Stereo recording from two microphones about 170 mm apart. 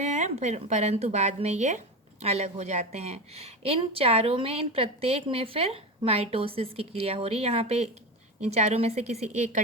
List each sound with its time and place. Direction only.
0.0 s a woman's voice: 40° right (ahead or behind)